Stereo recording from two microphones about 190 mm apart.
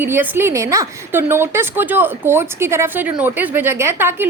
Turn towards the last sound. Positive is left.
turn(degrees=-15)  # may be behind; listen again after turning